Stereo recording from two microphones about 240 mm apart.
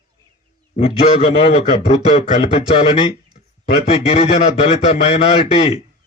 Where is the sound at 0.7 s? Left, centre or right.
Left.